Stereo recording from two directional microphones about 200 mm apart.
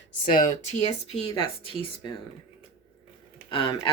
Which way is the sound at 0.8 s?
30° left (ahead or behind).